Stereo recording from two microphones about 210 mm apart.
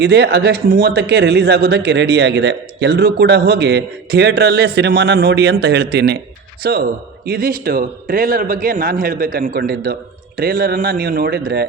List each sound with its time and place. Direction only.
0.0 s speech: 50° right (ahead or behind)